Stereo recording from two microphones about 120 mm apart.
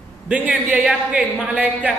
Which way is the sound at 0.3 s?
10° right (ahead or behind).